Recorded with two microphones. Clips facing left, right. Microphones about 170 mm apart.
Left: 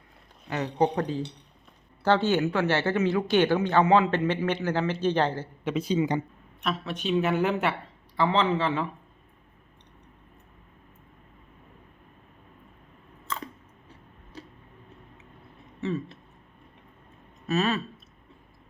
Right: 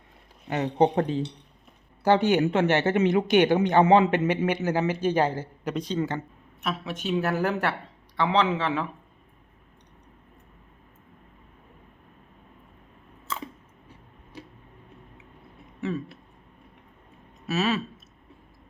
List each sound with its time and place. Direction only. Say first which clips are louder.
0.4 s a man's voice: right 3 dB; 25° right (ahead or behind)
4.3 s a man's voice: right 2 dB; 15° right (ahead or behind)
5.7 s speech: left 3 dB; 10° left (ahead or behind)
6.6 s a man's voice: left 1 dB; 5° right (ahead or behind)
17.4 s speech: even; 5° right (ahead or behind)